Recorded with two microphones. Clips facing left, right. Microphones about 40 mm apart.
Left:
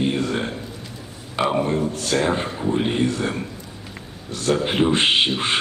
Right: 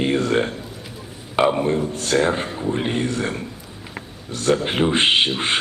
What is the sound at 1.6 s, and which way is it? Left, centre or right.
Speech, centre.